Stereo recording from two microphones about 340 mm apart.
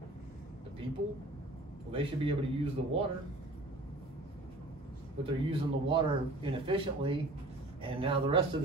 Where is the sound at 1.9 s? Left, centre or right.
Centre.